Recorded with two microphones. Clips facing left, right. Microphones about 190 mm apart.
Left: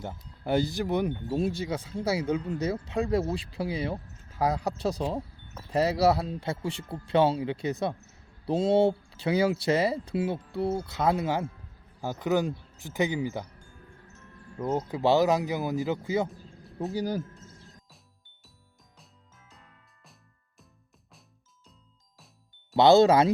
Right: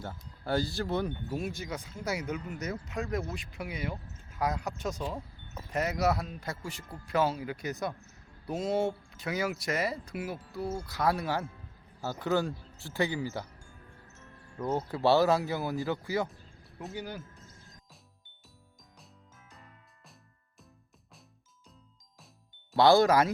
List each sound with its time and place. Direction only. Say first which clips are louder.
0.4 s speech: left 4 dB; 20° left (ahead or behind)
1.3 s speech: left 7 dB; 30° left (ahead or behind)
14.7 s speech: left 2 dB; 15° left (ahead or behind)
16.9 s speech: left 9 dB; 40° left (ahead or behind)
22.7 s speech: left 4 dB; 20° left (ahead or behind)